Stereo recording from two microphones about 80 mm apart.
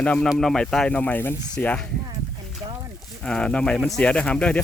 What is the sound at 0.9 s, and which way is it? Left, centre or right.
Speech, left.